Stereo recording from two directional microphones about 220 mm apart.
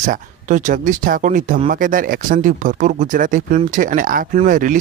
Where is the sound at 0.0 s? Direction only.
35° right (ahead or behind).